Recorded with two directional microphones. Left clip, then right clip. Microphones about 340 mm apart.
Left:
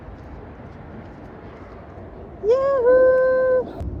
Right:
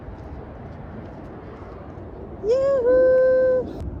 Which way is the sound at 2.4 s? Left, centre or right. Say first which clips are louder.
Left 2 dB; centre.